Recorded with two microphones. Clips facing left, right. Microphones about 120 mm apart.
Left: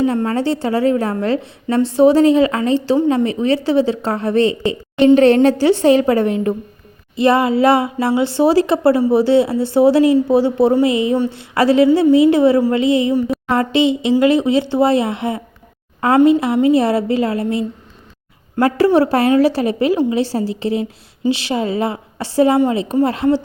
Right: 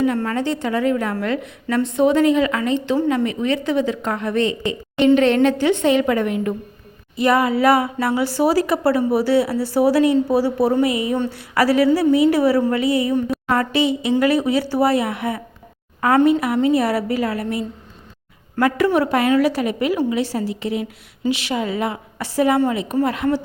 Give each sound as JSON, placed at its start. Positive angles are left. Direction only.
{"t": 0.0, "sound": "a woman's voice", "side_deg": 30}
{"t": 18.9, "sound": "a woman's voice", "side_deg": 35}